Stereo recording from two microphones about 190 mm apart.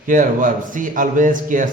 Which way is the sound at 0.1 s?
45° right (ahead or behind).